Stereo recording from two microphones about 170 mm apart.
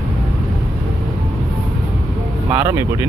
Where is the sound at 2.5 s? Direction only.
15° right (ahead or behind).